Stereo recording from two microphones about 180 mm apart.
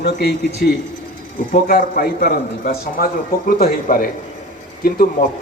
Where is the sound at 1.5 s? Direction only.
55° left (ahead or behind).